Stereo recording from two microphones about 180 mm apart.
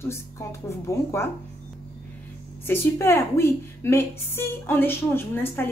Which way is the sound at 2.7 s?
15° left (ahead or behind).